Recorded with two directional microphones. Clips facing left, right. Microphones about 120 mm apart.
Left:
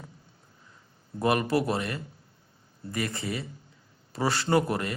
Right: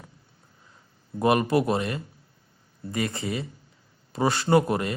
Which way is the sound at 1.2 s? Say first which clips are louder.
Right 3 dB; 20° right (ahead or behind).